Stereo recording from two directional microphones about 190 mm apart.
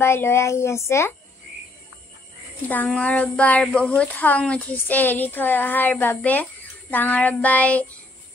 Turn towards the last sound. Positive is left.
turn(degrees=5)  # may be behind; listen again after turning